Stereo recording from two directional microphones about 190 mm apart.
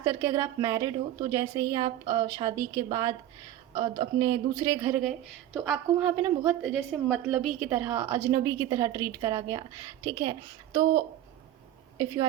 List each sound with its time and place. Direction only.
0.0 s a woman's voice: 15° right (ahead or behind)